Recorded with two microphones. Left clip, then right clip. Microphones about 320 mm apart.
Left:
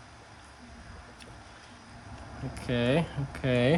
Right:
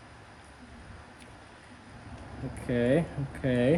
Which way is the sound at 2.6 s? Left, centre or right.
Centre.